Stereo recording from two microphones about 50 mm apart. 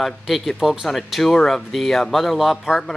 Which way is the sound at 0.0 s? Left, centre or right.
Centre.